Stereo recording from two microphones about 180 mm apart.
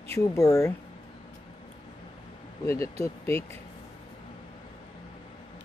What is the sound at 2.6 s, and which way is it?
Speech, 15° left (ahead or behind).